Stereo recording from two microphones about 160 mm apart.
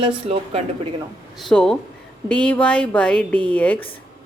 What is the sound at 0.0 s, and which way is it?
Speech, 40° right (ahead or behind).